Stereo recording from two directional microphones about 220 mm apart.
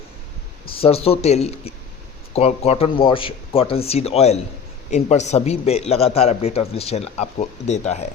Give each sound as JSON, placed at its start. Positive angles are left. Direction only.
{"t": 0.8, "sound": "a man's voice", "side_deg": 25}